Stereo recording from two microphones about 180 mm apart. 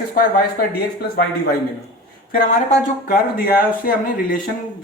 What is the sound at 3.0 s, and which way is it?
A man's voice, 60° left (ahead or behind).